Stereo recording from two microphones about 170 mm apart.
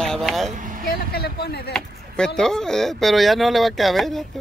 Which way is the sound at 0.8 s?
65° left (ahead or behind).